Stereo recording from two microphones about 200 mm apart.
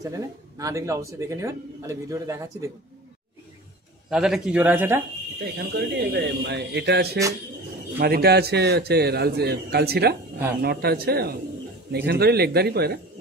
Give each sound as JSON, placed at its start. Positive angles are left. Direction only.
{"t": 0.0, "sound": "speech", "side_deg": -15}
{"t": 4.1, "sound": "speech", "side_deg": -5}
{"t": 5.4, "sound": "a man's voice", "side_deg": -55}